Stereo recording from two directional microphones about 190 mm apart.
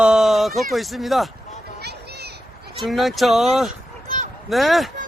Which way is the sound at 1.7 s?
60° right (ahead or behind).